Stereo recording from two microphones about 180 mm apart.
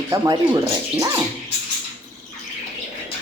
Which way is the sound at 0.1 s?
20° right (ahead or behind).